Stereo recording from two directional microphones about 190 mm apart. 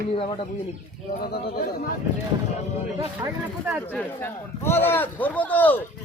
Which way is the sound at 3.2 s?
15° right (ahead or behind).